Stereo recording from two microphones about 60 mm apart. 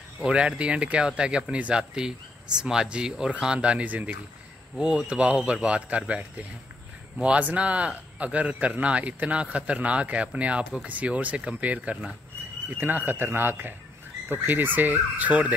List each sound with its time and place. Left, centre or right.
0.2 s a man's voice: centre
12.7 s a man's voice: right